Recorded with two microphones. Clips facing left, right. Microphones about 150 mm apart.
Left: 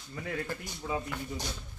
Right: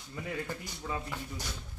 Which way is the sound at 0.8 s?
10° left (ahead or behind).